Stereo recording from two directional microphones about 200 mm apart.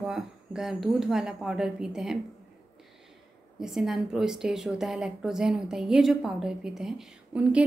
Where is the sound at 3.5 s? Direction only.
Centre (ahead or behind).